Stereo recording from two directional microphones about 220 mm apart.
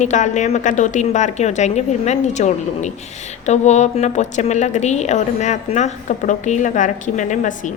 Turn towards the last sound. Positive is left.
turn(degrees=35)  # may be behind; listen again after turning